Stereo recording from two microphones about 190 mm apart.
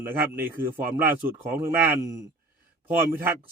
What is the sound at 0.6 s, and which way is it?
Speech, 50° right (ahead or behind).